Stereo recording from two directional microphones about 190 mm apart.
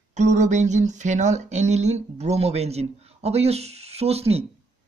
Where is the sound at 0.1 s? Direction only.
40° right (ahead or behind).